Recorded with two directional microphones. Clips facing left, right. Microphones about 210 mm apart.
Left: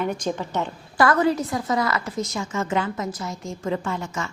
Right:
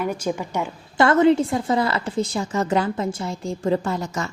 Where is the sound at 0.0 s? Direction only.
10° right (ahead or behind).